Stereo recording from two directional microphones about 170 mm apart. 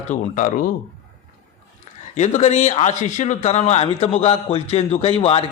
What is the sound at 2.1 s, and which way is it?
Speech, 45° left (ahead or behind).